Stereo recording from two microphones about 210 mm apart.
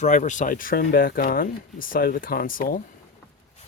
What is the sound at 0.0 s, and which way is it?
Speech, 35° left (ahead or behind).